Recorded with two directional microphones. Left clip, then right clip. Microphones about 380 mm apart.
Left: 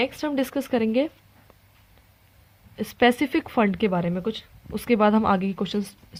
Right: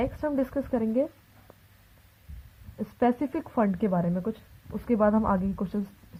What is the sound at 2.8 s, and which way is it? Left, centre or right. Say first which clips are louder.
A woman's voice: left 6 dB; left.